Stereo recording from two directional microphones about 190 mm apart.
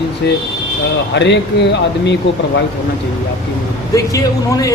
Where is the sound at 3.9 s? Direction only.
15° left (ahead or behind).